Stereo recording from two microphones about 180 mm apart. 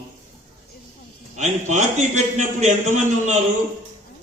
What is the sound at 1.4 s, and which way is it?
A man's voice, 40° right (ahead or behind).